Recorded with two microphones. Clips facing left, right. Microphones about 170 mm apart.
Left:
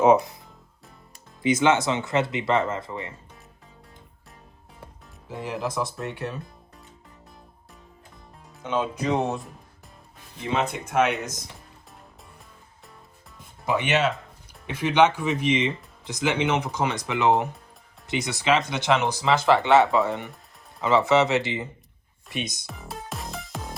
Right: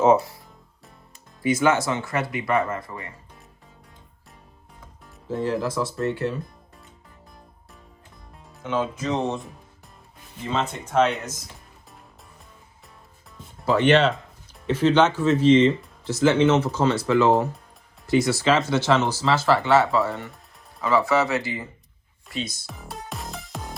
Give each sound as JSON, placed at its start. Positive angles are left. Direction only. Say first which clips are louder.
{"t": 0.0, "sound": "speech", "louder": "even", "side_deg": 15}
{"t": 1.4, "sound": "speech", "louder": "even", "side_deg": 20}
{"t": 5.5, "sound": "speech", "louder": "right 1 dB", "side_deg": 15}
{"t": 8.6, "sound": "speech", "louder": "even", "side_deg": 15}
{"t": 13.7, "sound": "speech", "louder": "right 5 dB", "side_deg": 10}
{"t": 22.6, "sound": "music", "louder": "even", "side_deg": 0}